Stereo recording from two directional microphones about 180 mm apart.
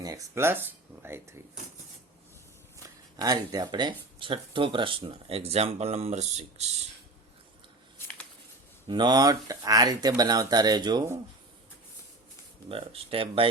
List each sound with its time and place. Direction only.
0.0 s speech: 15° right (ahead or behind)
3.2 s speech: 20° right (ahead or behind); by 6.8 s 40° right (ahead or behind)
7.9 s a sound: 10° left (ahead or behind)
8.9 s speech: 25° right (ahead or behind)
12.6 s speech: 30° right (ahead or behind)